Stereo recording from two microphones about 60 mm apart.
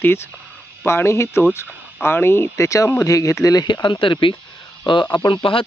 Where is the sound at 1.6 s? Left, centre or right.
Left.